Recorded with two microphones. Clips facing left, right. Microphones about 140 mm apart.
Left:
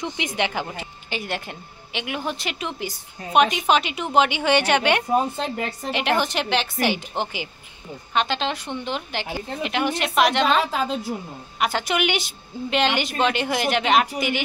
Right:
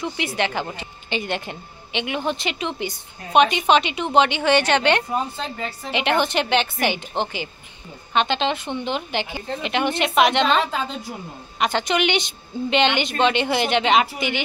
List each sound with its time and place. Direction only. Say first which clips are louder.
0.2 s a woman's voice: right 2 dB; 15° left (ahead or behind)
0.7 s a woman's voice: right 3 dB; 5° left (ahead or behind)